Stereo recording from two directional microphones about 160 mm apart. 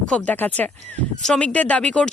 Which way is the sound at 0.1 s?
10° left (ahead or behind).